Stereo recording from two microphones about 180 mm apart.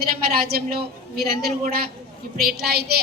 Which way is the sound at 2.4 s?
60° right (ahead or behind).